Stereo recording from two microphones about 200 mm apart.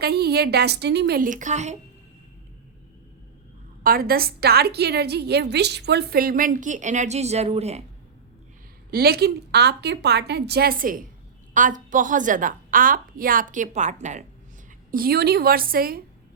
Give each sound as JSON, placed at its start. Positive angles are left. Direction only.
{"t": 0.0, "sound": "a woman's voice", "side_deg": -50}
{"t": 3.8, "sound": "a woman's voice", "side_deg": -45}
{"t": 8.9, "sound": "a woman's voice", "side_deg": -50}
{"t": 14.8, "sound": "a woman's voice", "side_deg": -45}